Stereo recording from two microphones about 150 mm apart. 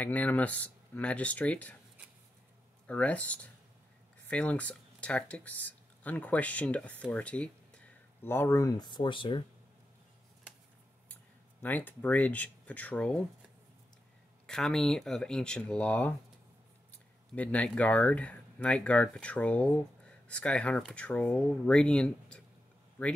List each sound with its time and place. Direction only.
0.0 s speech: 10° left (ahead or behind)
2.9 s speech: 10° left (ahead or behind); by 9.4 s 35° left (ahead or behind)
11.6 s speech: 10° left (ahead or behind)
14.4 s speech: 5° left (ahead or behind)
17.4 s speech: 10° left (ahead or behind)